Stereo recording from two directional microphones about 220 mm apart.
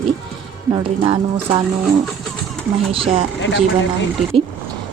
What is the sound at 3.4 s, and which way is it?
Speech, 55° left (ahead or behind).